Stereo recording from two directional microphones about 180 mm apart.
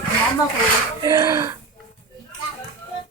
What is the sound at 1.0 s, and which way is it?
Speech, 20° right (ahead or behind).